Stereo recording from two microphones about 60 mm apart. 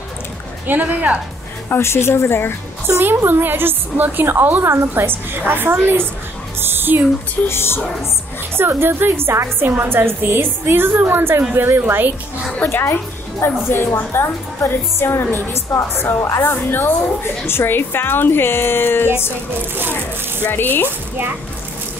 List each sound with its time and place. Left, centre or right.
0.7 s speech: right
1.7 s a woman's voice: left
2.9 s a woman's voice: right
6.6 s a sound: right
7.4 s a woman's voice: left
8.5 s a woman's voice: right
12.7 s a woman's voice: left
20.5 s speech: left